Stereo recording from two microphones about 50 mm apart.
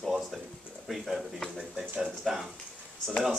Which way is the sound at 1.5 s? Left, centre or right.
Centre.